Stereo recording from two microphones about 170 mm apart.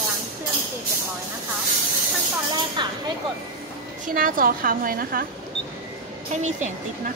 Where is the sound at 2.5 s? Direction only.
25° right (ahead or behind).